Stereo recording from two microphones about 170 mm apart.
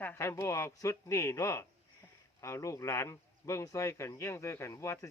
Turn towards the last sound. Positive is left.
turn(degrees=15)  # may be behind; listen again after turning